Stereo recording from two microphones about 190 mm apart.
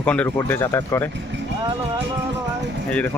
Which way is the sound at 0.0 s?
5° left (ahead or behind).